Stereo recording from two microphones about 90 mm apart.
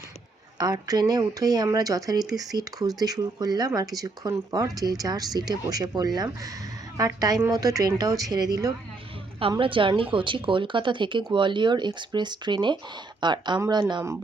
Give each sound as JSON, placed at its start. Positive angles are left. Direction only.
{"t": 0.6, "sound": "speech", "side_deg": -45}
{"t": 9.6, "sound": "a woman's voice", "side_deg": -70}